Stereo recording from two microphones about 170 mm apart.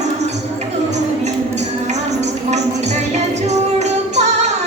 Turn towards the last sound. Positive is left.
turn(degrees=-40)  # may be behind; listen again after turning